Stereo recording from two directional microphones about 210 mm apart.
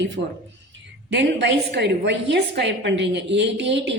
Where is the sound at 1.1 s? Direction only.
55° right (ahead or behind).